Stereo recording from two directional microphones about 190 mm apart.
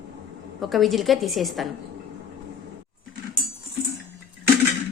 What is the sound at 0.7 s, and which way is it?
Speech, centre (ahead or behind).